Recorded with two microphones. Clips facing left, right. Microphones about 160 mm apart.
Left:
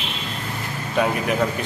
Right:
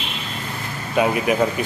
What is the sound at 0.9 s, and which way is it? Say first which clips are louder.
Speech: right 3 dB; 5° right (ahead or behind).